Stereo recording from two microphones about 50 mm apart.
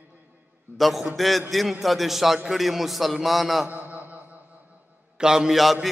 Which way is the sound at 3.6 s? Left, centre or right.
Right.